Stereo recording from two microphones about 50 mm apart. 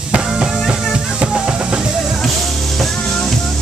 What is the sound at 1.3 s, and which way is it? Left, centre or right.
Music, centre.